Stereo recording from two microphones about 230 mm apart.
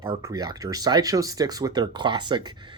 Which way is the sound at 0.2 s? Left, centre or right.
Centre.